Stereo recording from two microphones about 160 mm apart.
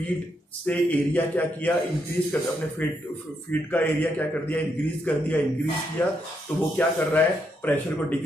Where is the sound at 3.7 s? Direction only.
10° left (ahead or behind).